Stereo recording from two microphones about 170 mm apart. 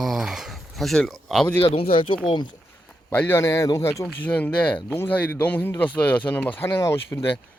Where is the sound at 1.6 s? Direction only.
35° left (ahead or behind).